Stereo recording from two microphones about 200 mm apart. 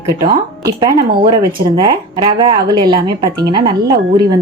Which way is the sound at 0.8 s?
20° right (ahead or behind).